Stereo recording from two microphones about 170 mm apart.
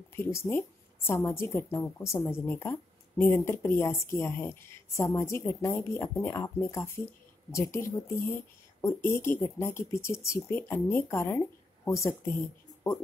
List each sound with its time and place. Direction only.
0.1 s a woman's voice: 15° left (ahead or behind)